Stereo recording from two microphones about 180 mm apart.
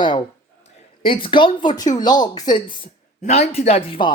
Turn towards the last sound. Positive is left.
turn(degrees=30)  # may be behind; listen again after turning